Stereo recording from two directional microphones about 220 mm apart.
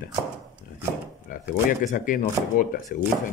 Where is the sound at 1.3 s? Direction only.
35° left (ahead or behind).